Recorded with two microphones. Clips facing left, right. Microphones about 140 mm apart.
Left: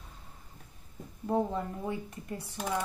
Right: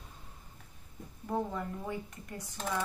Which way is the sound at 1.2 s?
25° left (ahead or behind).